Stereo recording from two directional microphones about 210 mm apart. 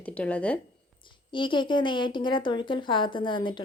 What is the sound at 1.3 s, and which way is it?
A woman's voice, 20° left (ahead or behind).